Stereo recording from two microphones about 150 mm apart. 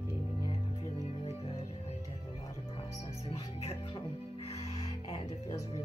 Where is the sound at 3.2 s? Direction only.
40° left (ahead or behind).